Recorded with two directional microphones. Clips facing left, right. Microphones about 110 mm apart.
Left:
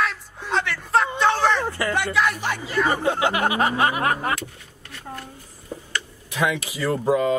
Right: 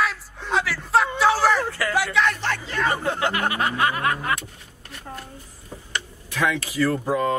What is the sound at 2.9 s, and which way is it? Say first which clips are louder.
Speech: left 3 dB; 25° left (ahead or behind).